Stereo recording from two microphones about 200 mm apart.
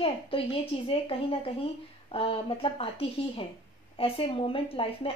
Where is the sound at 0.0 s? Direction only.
25° left (ahead or behind).